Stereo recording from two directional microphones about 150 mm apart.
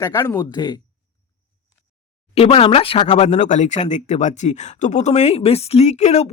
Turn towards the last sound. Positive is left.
turn(degrees=50)  # may be behind; listen again after turning